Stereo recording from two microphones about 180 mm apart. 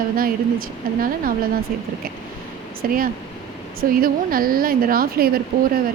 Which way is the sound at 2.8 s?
50° right (ahead or behind).